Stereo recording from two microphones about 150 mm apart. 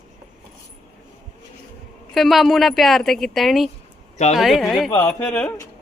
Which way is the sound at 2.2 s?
Centre (ahead or behind).